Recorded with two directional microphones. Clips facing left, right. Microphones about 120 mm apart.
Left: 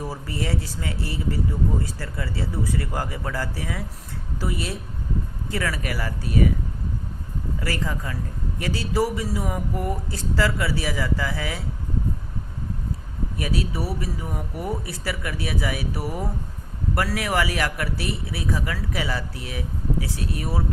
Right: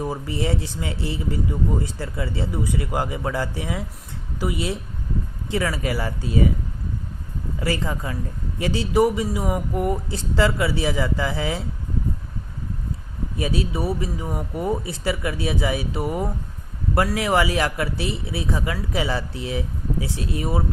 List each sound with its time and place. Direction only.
0.0 s a man's voice: 20° right (ahead or behind)
7.6 s a man's voice: 25° right (ahead or behind)
13.3 s a man's voice: 25° right (ahead or behind)